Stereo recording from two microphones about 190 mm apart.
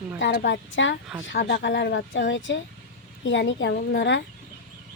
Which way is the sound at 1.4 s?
60° left (ahead or behind).